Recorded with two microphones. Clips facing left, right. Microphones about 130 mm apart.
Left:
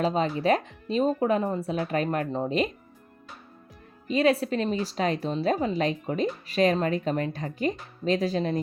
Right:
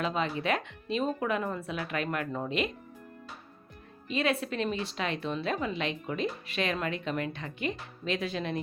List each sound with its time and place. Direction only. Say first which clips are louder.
0.0 s a woman's voice: left 6 dB; 35° left (ahead or behind)
4.1 s a woman's voice: left 7 dB; 35° left (ahead or behind)